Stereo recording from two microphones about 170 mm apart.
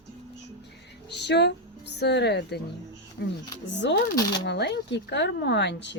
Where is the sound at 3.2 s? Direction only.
65° left (ahead or behind).